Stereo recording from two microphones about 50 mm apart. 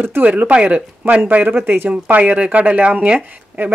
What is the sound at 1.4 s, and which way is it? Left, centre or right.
Speech, right.